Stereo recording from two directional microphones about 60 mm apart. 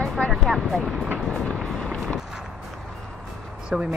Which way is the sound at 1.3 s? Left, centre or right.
Centre.